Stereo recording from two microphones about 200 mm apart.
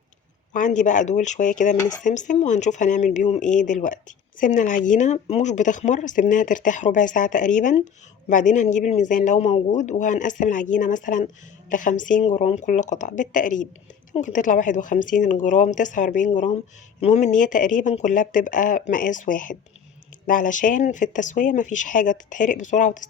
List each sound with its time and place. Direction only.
0.5 s a man's voice: 40° left (ahead or behind)